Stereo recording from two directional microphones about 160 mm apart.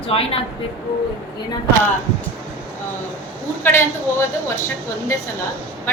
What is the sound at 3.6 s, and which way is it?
Speech, 15° left (ahead or behind).